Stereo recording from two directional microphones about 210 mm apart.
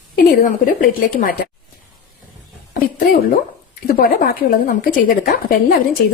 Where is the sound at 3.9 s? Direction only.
45° left (ahead or behind).